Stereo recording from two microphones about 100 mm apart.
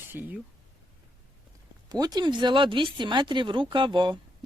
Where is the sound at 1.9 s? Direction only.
40° right (ahead or behind).